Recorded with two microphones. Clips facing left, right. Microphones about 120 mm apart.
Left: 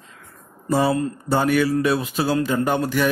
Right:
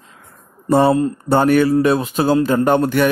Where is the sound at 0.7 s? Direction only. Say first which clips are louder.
Right 6 dB; 55° right (ahead or behind).